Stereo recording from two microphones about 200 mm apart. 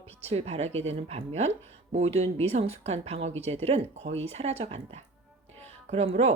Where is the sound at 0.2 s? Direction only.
30° right (ahead or behind).